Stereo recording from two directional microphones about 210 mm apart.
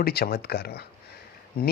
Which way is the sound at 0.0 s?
45° left (ahead or behind).